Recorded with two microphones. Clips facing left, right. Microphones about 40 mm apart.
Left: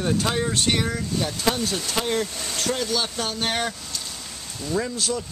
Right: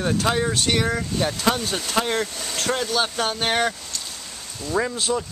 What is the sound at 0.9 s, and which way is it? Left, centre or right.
Speech, right.